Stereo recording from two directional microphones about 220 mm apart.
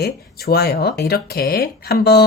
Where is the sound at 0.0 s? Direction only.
45° left (ahead or behind).